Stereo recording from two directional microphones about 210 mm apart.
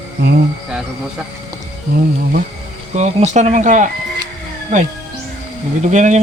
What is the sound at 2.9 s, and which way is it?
Speech, 35° right (ahead or behind).